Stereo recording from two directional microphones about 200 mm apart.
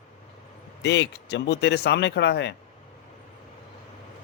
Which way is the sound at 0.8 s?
60° left (ahead or behind).